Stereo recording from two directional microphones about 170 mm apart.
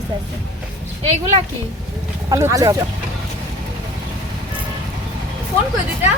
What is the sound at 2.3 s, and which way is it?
Speech, 20° right (ahead or behind).